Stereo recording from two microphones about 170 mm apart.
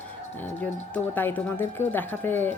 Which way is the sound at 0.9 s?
10° left (ahead or behind).